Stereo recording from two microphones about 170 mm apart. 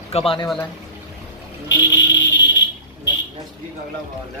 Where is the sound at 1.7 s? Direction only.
90° left.